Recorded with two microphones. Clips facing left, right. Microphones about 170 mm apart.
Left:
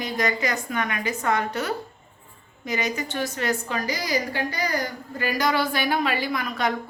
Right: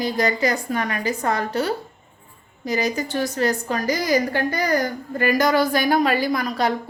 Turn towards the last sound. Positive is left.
turn(degrees=-35)  # may be behind; listen again after turning